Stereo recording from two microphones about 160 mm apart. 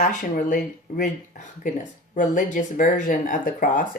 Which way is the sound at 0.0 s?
55° left (ahead or behind).